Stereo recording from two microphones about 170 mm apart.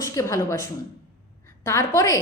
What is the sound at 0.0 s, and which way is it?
A woman's voice, 20° left (ahead or behind).